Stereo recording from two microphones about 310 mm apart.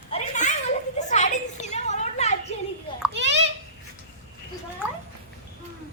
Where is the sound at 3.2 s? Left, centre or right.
Right.